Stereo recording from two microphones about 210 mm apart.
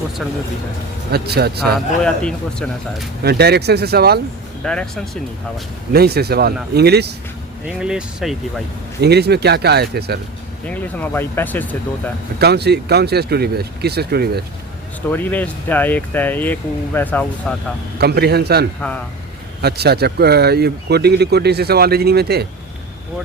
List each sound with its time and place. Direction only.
1.1 s speech: 50° right (ahead or behind)
1.7 s speech: 5° left (ahead or behind)
3.2 s speech: 50° right (ahead or behind)
4.6 s speech: 5° left (ahead or behind)
5.9 s speech: 50° right (ahead or behind)
7.8 s speech: 5° right (ahead or behind)
9.0 s speech: 50° right (ahead or behind)
10.7 s speech: 5° left (ahead or behind)
12.4 s speech: 50° right (ahead or behind)
15.1 s speech: 10° left (ahead or behind)
18.0 s speech: 50° right (ahead or behind)